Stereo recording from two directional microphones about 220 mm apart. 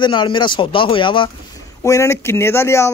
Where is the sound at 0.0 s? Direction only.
20° left (ahead or behind).